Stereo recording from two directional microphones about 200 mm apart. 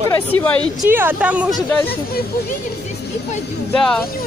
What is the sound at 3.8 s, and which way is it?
Speech, 5° left (ahead or behind).